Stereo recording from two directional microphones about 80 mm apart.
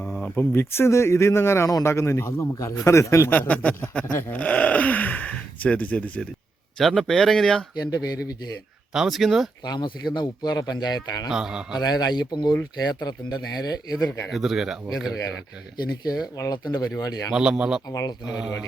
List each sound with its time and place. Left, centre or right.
0.0 s a sound: centre
0.3 s a man's voice: left
3.3 s speech: centre
6.7 s speech: centre
7.8 s speech: left
8.9 s speech: centre
9.6 s speech: left
11.3 s a man's voice: centre
11.8 s speech: left
14.3 s speech: centre
16.5 s speech: left
17.3 s a man's voice: centre